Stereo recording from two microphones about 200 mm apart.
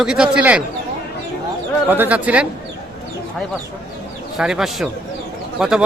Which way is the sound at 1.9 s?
10° right (ahead or behind).